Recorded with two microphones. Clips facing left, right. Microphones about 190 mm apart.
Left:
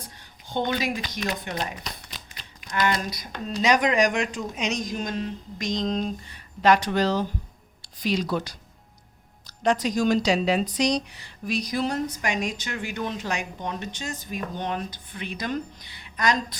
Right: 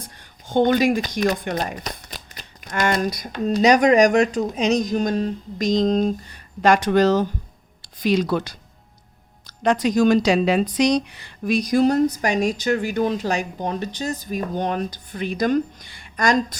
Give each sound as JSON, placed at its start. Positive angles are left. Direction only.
{"t": 0.4, "sound": "a woman's voice", "side_deg": -50}